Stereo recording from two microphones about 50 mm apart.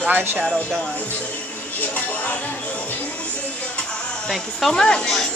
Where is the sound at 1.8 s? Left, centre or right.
Left.